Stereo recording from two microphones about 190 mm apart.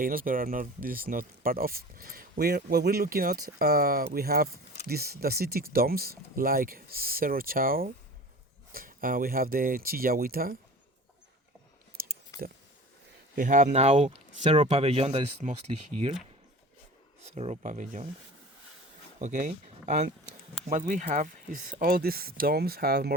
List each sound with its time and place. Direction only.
0.0 s speech: 45° right (ahead or behind)
12.0 s a sound: 50° right (ahead or behind)
13.3 s speech: 45° right (ahead or behind)
17.2 s speech: 35° right (ahead or behind)
19.2 s speech: 45° right (ahead or behind)